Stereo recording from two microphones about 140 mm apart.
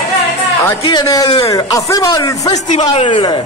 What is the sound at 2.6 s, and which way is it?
Speech, 50° left (ahead or behind).